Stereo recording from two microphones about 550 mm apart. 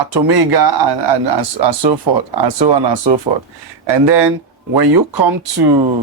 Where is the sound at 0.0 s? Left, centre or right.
Right.